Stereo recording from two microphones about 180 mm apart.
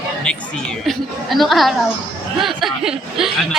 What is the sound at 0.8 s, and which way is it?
A woman's voice, centre (ahead or behind).